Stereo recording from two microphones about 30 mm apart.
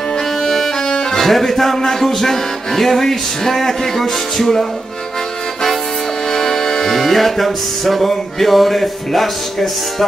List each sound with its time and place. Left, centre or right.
0.8 s music: left
1.2 s music: centre
6.3 s music: centre